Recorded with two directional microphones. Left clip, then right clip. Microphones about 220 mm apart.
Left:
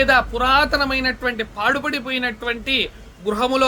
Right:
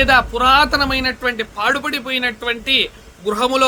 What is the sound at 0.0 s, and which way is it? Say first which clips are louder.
Speech: right 3 dB; 10° right (ahead or behind).